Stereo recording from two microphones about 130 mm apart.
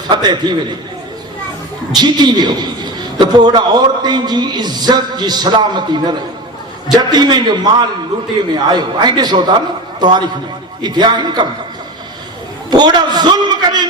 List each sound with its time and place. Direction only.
0.1 s a man's voice: 35° right (ahead or behind)
1.9 s a man's voice: 35° right (ahead or behind)
12.7 s a sound: 35° right (ahead or behind)